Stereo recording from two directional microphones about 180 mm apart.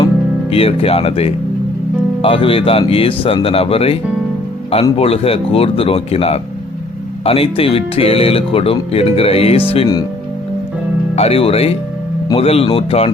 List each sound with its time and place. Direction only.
0.5 s speech: 35° left (ahead or behind)
11.1 s speech: 35° left (ahead or behind)